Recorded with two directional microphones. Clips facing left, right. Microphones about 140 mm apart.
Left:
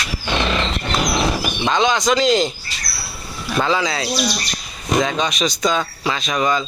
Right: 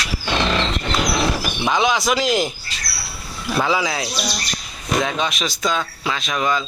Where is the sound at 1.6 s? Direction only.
5° right (ahead or behind).